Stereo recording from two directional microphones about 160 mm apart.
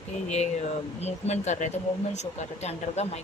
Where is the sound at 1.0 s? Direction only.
45° left (ahead or behind).